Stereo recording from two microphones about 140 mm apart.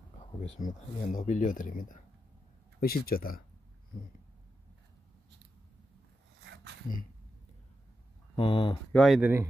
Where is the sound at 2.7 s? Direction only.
90° left.